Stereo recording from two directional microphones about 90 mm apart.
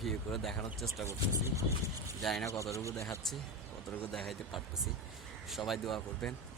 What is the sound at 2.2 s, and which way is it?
Speech, centre (ahead or behind).